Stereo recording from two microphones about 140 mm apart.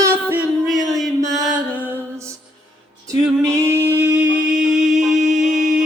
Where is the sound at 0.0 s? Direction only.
15° right (ahead or behind).